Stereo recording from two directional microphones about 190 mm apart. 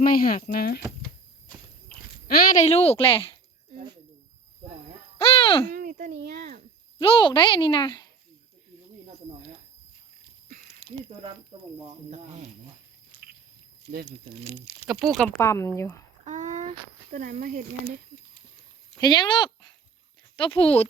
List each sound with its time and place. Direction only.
0.0 s speech: 50° left (ahead or behind)
2.2 s a woman's voice: 50° left (ahead or behind); by 3.3 s 30° left (ahead or behind)
5.2 s speech: 30° left (ahead or behind)
5.7 s a child's voice: 45° right (ahead or behind)
7.0 s speech: 25° left (ahead or behind)
10.8 s a sound: 35° left (ahead or behind)
12.1 s speech: 35° right (ahead or behind)
13.1 s biting: 10° left (ahead or behind)
15.1 s speech: 5° left (ahead or behind)
16.2 s speech: 40° right (ahead or behind)
18.9 s speech: 25° left (ahead or behind)